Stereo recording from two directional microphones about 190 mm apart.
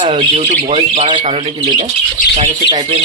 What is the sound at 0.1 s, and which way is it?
Speech, 25° right (ahead or behind).